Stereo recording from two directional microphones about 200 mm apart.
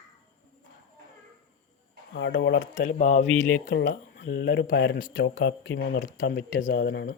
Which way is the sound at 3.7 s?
60° left (ahead or behind).